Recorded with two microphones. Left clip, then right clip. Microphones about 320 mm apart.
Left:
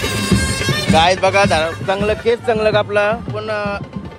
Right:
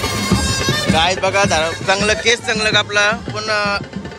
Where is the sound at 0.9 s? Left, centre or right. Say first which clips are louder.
Left 4 dB; centre.